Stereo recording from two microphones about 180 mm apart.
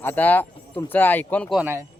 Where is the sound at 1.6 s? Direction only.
10° right (ahead or behind).